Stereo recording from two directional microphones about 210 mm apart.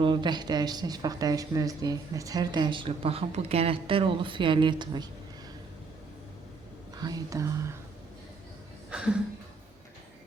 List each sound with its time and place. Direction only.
0.0 s speech: 20° right (ahead or behind)
6.9 s speech: 20° right (ahead or behind)
8.9 s a sound: 5° right (ahead or behind)